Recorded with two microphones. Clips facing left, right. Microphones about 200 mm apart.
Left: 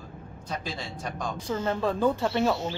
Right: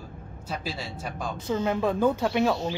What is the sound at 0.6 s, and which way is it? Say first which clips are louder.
Speech: right 1 dB; 5° right (ahead or behind).